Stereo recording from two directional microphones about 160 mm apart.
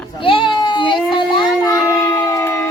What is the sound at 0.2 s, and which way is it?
Baby cry, 35° left (ahead or behind).